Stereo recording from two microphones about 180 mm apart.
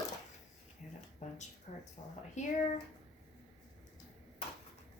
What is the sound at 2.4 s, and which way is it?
Speech, 40° left (ahead or behind).